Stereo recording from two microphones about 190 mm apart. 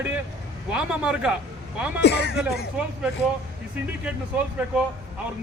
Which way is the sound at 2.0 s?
60° left (ahead or behind).